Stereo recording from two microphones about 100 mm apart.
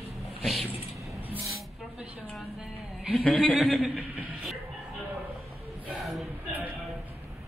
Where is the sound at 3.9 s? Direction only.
5° right (ahead or behind).